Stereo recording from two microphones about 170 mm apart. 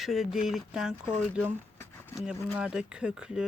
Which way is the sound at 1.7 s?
15° left (ahead or behind).